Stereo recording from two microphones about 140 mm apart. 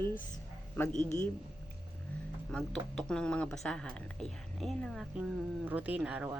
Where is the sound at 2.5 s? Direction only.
5° left (ahead or behind).